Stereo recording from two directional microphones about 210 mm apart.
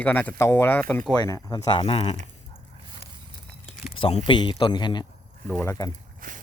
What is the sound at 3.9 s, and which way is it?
Speech, 25° left (ahead or behind).